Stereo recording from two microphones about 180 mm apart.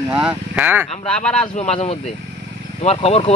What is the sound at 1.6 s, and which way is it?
Speech, 35° left (ahead or behind).